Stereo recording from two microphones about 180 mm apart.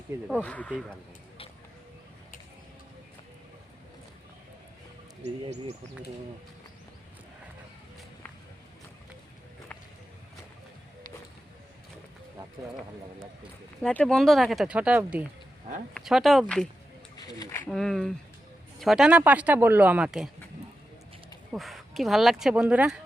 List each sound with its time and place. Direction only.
0.3 s speech: 5° left (ahead or behind)
5.2 s speech: 35° right (ahead or behind)
13.8 s speech: 5° left (ahead or behind)
17.2 s a sound: 20° left (ahead or behind)
17.7 s speech: 5° left (ahead or behind)
21.5 s speech: centre (ahead or behind)